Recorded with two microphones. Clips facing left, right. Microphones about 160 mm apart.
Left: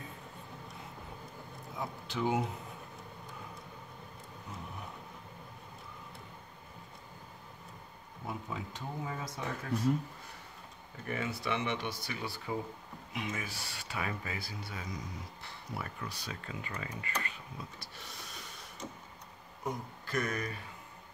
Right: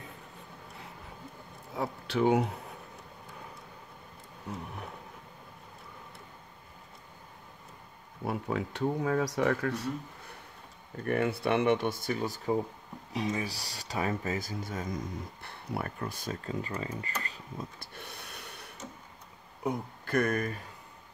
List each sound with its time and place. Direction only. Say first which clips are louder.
1.8 s speech: right 7 dB; 65° right (ahead or behind)
8.3 s speech: right 8 dB; 70° right (ahead or behind)
11.1 s speech: right 8 dB; 60° right (ahead or behind); by 17.6 s 35° right (ahead or behind)
17.7 s snort: right 3 dB; 55° right (ahead or behind)
19.6 s speech: right 5 dB; 60° right (ahead or behind)